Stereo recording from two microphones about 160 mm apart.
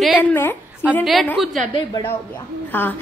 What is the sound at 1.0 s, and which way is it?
Speech, centre (ahead or behind).